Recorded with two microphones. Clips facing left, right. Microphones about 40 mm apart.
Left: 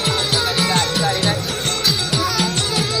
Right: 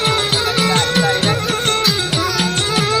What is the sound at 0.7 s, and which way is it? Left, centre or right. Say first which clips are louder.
Music: right 3 dB; right.